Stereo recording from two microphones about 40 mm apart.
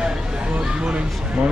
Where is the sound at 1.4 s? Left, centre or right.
Right.